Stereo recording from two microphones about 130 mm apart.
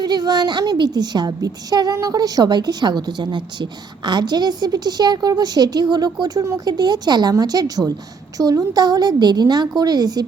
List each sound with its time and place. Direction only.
0.0 s a woman's voice: 30° right (ahead or behind)